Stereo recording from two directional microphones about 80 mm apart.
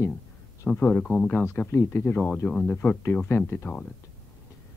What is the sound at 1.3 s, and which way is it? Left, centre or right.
Speech, left.